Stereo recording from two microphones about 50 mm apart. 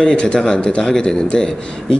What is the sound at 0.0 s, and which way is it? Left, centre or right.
Speech, left.